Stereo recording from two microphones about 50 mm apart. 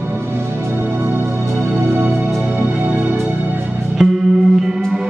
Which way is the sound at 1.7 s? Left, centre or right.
Right.